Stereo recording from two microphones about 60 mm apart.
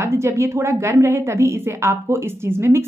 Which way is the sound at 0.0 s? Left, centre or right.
Right.